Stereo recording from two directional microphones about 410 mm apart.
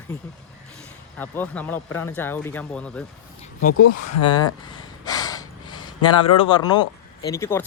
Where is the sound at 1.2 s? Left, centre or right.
Centre.